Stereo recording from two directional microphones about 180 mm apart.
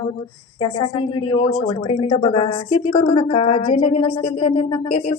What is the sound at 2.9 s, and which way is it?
Speech, 30° left (ahead or behind).